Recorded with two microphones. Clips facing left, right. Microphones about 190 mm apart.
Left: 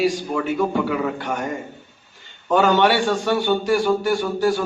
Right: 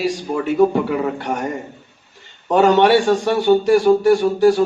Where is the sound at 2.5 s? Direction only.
25° right (ahead or behind).